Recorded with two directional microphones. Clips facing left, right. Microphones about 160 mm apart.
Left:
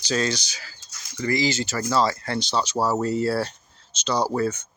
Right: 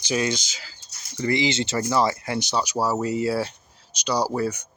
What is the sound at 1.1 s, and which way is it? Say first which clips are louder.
Speech: right 1 dB; 25° right (ahead or behind).